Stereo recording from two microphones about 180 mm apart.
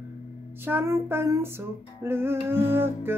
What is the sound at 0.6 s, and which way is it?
Child singing, 15° right (ahead or behind).